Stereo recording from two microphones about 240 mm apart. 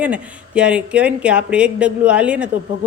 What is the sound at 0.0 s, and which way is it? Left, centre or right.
Speech, centre.